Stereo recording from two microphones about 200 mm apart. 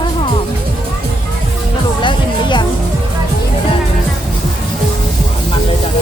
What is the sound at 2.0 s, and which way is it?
Music, 25° left (ahead or behind).